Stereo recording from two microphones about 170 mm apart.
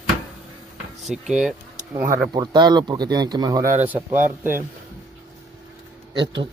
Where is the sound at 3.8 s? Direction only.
10° right (ahead or behind).